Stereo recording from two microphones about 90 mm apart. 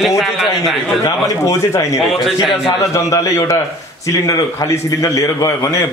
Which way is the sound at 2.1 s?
Centre (ahead or behind).